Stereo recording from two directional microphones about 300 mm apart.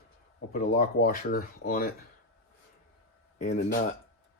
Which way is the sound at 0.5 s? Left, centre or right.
Left.